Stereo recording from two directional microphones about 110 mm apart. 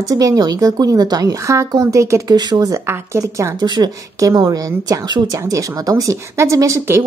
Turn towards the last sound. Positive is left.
turn(degrees=-25)  # may be behind; listen again after turning